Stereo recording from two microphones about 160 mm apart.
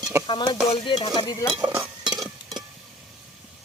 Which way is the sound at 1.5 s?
20° right (ahead or behind).